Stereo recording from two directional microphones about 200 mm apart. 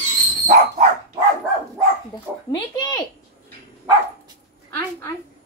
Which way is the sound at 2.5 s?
20° left (ahead or behind).